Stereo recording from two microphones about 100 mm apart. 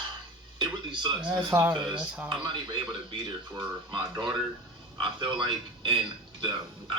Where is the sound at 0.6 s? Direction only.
50° right (ahead or behind).